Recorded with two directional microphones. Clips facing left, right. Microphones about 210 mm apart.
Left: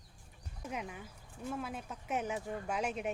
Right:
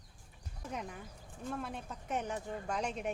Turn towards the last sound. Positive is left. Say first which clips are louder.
# left 1 dB
turn(degrees=5)  # may be behind; listen again after turning